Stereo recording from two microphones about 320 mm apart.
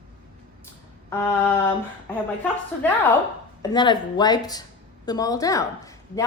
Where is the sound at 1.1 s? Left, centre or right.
Centre.